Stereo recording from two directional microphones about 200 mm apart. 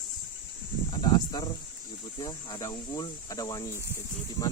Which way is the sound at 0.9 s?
20° left (ahead or behind).